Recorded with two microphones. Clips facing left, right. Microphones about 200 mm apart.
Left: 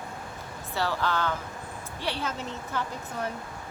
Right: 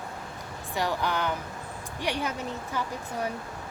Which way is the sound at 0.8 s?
15° right (ahead or behind).